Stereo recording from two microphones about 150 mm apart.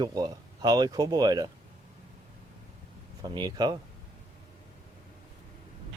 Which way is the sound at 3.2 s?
25° right (ahead or behind).